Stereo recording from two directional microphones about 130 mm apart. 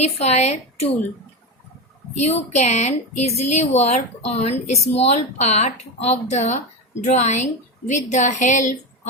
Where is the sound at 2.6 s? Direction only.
60° left (ahead or behind).